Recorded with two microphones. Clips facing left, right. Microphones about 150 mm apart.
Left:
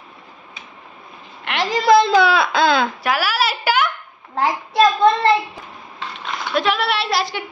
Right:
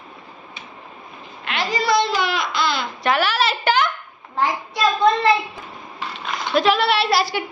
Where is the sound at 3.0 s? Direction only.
5° left (ahead or behind).